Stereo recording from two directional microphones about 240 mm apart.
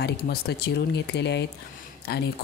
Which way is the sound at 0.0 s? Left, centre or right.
Left.